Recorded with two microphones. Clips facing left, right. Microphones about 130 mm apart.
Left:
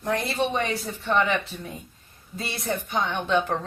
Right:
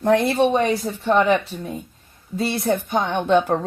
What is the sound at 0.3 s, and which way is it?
Speech, 40° right (ahead or behind).